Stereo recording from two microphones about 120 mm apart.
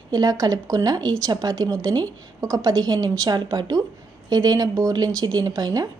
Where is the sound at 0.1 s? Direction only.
30° right (ahead or behind).